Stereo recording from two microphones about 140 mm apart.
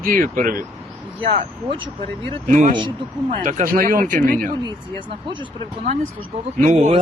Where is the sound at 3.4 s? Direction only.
80° right.